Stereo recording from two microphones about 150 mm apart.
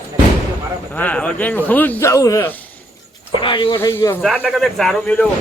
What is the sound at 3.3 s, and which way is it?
Speech, 35° left (ahead or behind).